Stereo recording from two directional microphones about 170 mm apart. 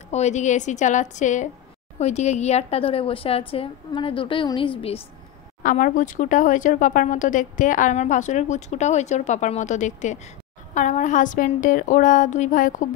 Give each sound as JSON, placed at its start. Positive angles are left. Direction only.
{"t": 0.1, "sound": "a woman's voice", "side_deg": 40}
{"t": 5.6, "sound": "speech", "side_deg": 55}